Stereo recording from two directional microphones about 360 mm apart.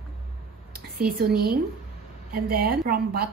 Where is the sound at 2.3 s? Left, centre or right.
Right.